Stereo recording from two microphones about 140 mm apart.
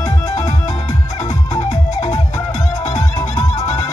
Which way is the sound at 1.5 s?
55° left (ahead or behind).